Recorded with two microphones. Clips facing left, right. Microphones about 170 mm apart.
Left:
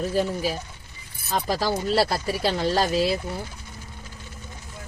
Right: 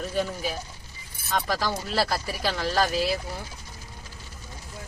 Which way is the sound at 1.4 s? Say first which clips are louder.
Left 3 dB; 30° left (ahead or behind).